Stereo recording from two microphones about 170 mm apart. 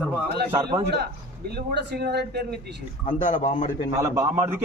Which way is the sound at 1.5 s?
75° right (ahead or behind).